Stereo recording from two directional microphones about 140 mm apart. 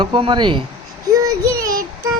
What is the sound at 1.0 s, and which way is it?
Child singing, 25° right (ahead or behind).